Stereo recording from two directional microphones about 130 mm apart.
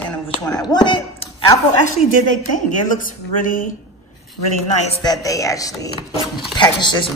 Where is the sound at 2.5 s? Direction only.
85° left.